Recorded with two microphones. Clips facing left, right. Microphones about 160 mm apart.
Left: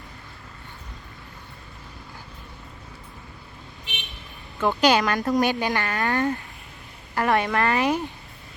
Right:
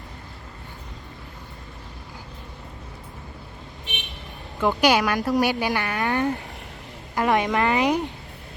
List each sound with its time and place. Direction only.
4.6 s speech: 10° right (ahead or behind)